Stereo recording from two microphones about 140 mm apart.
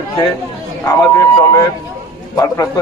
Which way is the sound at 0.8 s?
20° left (ahead or behind).